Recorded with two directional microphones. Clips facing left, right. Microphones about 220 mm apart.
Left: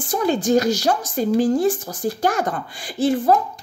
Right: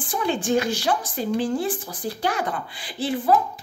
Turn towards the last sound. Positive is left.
turn(degrees=45)  # may be behind; listen again after turning